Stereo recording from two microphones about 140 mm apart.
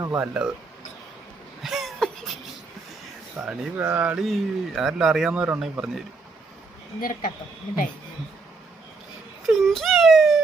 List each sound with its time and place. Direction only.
0.2 s speech: 5° right (ahead or behind)
1.6 s a sound: centre (ahead or behind)
3.4 s speech: centre (ahead or behind)
3.8 s speech: 10° right (ahead or behind)
7.0 s speech: 90° left
9.5 s a sound: centre (ahead or behind)